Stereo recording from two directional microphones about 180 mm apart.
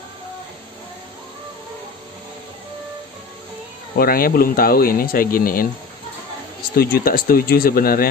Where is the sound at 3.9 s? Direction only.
55° left (ahead or behind).